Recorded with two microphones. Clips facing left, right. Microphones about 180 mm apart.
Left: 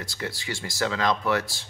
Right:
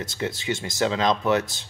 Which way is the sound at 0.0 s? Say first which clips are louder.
Right 5 dB; 20° right (ahead or behind).